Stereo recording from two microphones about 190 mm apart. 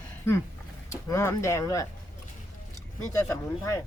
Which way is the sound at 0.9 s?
15° left (ahead or behind).